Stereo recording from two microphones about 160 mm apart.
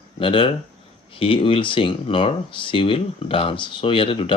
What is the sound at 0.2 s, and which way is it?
Speech, 35° left (ahead or behind).